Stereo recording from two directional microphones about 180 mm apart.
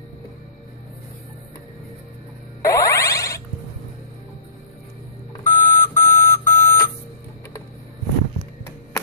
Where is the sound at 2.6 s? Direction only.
15° left (ahead or behind).